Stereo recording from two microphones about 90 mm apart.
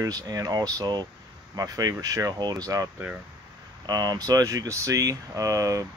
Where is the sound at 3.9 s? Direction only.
45° right (ahead or behind).